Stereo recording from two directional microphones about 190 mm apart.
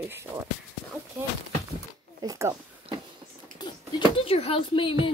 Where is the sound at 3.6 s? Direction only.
20° left (ahead or behind).